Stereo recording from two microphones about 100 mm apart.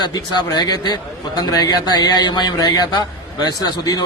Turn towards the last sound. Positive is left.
turn(degrees=40)  # may be behind; listen again after turning